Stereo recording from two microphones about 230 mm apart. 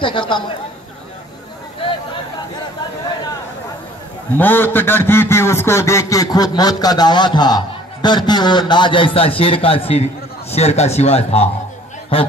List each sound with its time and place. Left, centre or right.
0.0 s a man's voice: left
4.4 s a man's voice: centre; by 12.3 s left